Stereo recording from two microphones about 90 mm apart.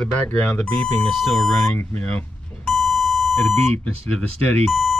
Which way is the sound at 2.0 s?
15° left (ahead or behind).